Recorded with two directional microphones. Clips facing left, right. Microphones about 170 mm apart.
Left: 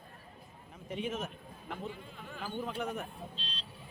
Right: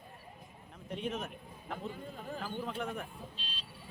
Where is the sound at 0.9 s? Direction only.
5° left (ahead or behind).